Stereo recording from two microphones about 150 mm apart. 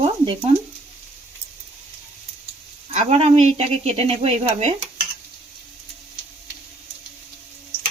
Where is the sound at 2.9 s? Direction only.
45° right (ahead or behind).